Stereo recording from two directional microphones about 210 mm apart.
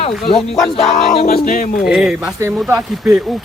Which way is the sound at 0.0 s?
30° left (ahead or behind).